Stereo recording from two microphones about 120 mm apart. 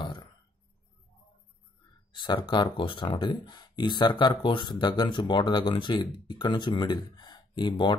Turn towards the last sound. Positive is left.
turn(degrees=40)  # may be behind; listen again after turning